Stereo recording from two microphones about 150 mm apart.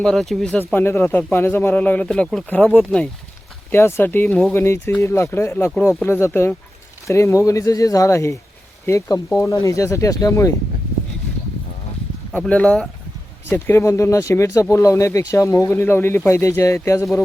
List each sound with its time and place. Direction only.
0.0 s speech: centre (ahead or behind)
0.7 s speech: 15° left (ahead or behind)
12.3 s speech: 10° left (ahead or behind)
13.5 s speech: 15° left (ahead or behind)